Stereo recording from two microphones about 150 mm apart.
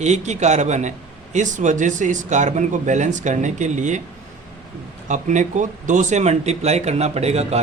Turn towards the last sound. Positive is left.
turn(degrees=-45)  # may be behind; listen again after turning